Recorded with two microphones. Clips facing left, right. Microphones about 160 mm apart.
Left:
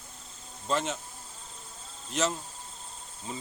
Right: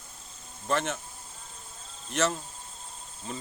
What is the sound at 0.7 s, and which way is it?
Speech, 15° left (ahead or behind).